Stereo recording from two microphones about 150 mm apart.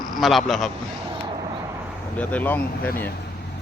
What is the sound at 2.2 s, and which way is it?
Speech, 10° left (ahead or behind).